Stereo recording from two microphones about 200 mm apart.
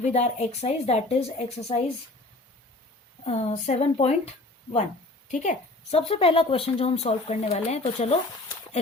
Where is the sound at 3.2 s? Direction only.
35° left (ahead or behind).